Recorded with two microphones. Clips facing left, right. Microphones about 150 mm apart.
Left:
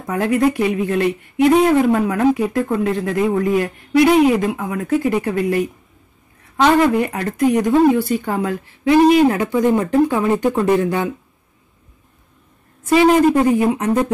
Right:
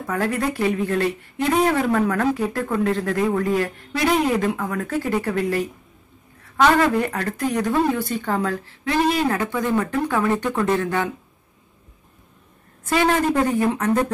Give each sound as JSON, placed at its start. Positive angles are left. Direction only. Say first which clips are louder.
{"t": 0.0, "sound": "speech", "louder": "left 6 dB", "side_deg": 15}
{"t": 12.9, "sound": "speech", "louder": "left 7 dB", "side_deg": 15}